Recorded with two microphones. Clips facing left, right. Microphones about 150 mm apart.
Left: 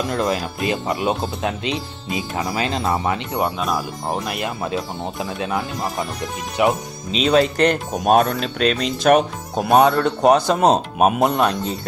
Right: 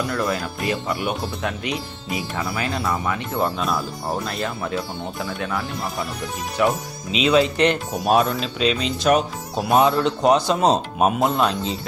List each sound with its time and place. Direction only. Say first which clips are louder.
0.1 s speech: left 2 dB; 20° left (ahead or behind)
7.1 s speech: left 1 dB; 40° left (ahead or behind); by 11.8 s 55° left (ahead or behind)